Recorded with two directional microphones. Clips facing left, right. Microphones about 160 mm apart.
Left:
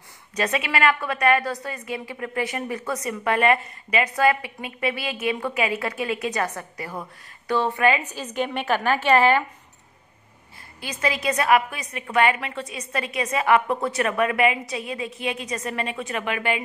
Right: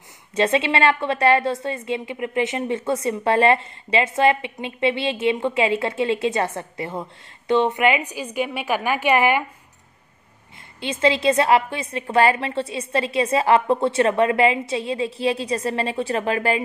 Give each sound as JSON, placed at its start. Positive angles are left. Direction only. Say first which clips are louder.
{"t": 0.4, "sound": "a woman's voice", "louder": "right 4 dB", "side_deg": -25}
{"t": 10.8, "sound": "a woman's voice", "louder": "right 7 dB", "side_deg": -25}